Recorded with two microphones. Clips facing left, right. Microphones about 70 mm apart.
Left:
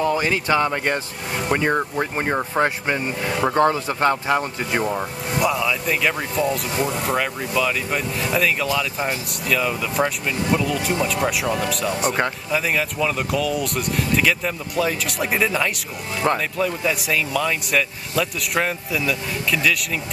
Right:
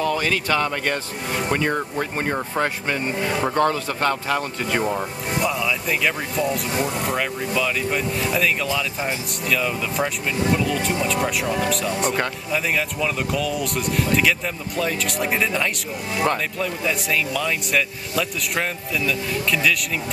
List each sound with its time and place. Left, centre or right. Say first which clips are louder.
0.0 s speech: left 2 dB; centre
4.8 s speech: even; centre